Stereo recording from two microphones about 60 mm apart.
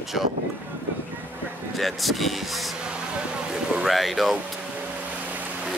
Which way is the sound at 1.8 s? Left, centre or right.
Centre.